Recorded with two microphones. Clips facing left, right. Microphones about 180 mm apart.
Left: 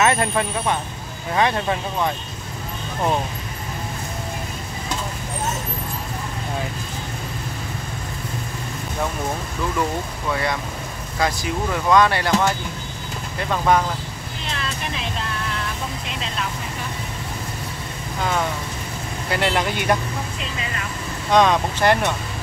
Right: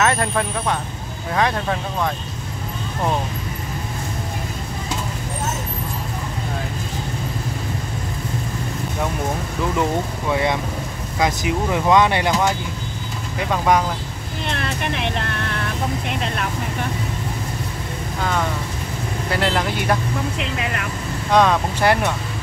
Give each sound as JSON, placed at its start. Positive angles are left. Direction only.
{"t": 0.0, "sound": "speech", "side_deg": 5}
{"t": 10.3, "sound": "speech", "side_deg": -20}
{"t": 14.4, "sound": "vehicle", "side_deg": -60}
{"t": 16.1, "sound": "speech", "side_deg": -55}
{"t": 19.3, "sound": "speech", "side_deg": 0}
{"t": 20.3, "sound": "speech", "side_deg": -60}
{"t": 21.3, "sound": "speech", "side_deg": -5}